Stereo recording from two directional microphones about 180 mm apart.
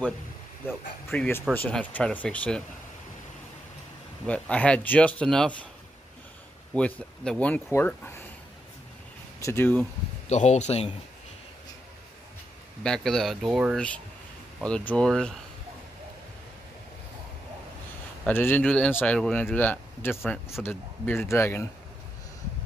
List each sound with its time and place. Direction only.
0.7 s speech: 10° left (ahead or behind)
4.3 s speech: 5° left (ahead or behind)
6.7 s speech: 5° left (ahead or behind)
9.4 s speech: 15° left (ahead or behind)
10.2 s speech: 40° left (ahead or behind)
12.8 s speech: 5° left (ahead or behind)
18.2 s speech: 10° left (ahead or behind)